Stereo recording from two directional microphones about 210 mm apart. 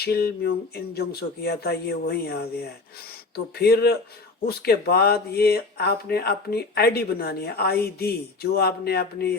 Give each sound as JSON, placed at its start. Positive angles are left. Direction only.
{"t": 0.0, "sound": "speech", "side_deg": 50}